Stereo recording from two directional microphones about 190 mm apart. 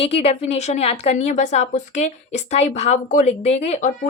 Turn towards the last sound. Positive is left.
turn(degrees=35)  # may be behind; listen again after turning